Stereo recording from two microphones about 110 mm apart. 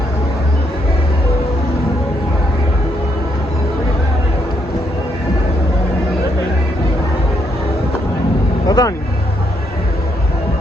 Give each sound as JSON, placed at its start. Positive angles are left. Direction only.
{"t": 8.6, "sound": "vehicle", "side_deg": 35}